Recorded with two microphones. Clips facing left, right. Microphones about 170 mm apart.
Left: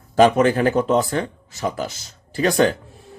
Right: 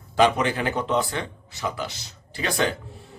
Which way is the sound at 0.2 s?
45° left (ahead or behind).